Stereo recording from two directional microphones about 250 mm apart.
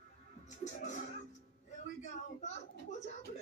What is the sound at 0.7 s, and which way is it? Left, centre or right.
Speech, left.